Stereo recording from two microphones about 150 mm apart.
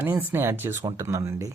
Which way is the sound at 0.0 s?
15° right (ahead or behind).